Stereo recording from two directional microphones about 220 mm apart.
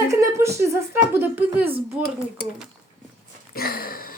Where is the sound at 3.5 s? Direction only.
40° left (ahead or behind).